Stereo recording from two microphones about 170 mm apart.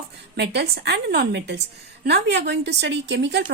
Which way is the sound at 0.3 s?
75° right (ahead or behind).